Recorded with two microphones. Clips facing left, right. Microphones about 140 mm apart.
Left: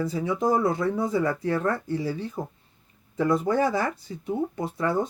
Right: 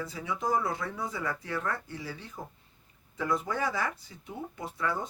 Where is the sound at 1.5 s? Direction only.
45° left (ahead or behind).